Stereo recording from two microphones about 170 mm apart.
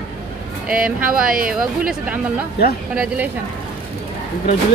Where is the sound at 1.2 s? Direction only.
55° right (ahead or behind).